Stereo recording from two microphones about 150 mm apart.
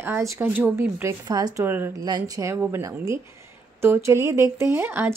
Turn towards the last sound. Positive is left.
turn(degrees=-15)  # may be behind; listen again after turning